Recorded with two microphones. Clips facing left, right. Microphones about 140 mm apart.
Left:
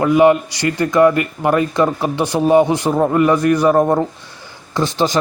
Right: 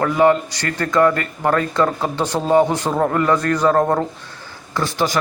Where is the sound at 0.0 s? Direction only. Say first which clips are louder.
Left 3 dB; 15° left (ahead or behind).